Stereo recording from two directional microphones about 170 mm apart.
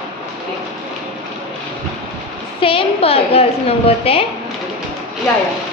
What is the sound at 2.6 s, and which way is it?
A woman's voice, 30° left (ahead or behind).